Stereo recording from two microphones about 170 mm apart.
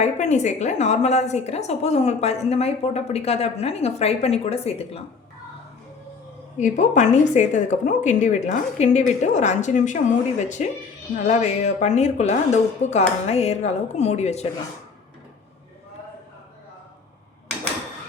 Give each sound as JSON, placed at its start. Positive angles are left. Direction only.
{"t": 0.0, "sound": "a woman's voice", "side_deg": 45}
{"t": 6.6, "sound": "a woman's voice", "side_deg": 45}